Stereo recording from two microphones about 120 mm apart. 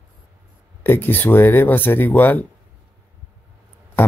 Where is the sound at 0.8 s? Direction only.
20° left (ahead or behind).